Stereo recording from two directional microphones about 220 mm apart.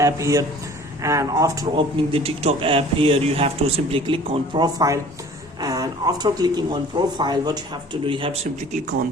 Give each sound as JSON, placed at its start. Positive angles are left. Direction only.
{"t": 0.0, "sound": "speech", "side_deg": -15}